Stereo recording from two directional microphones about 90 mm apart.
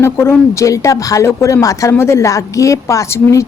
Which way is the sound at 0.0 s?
30° left (ahead or behind).